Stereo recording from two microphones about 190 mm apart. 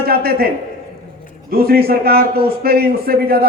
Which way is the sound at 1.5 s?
55° right (ahead or behind).